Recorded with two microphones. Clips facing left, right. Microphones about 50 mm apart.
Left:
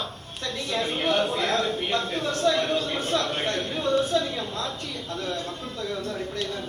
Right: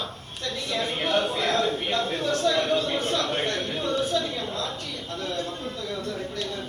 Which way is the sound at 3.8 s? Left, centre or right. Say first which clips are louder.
Left 3 dB; left.